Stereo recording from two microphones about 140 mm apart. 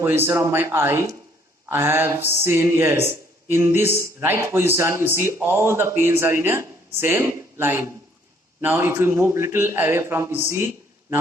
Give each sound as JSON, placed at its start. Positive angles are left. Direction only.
{"t": 0.0, "sound": "speech", "side_deg": -15}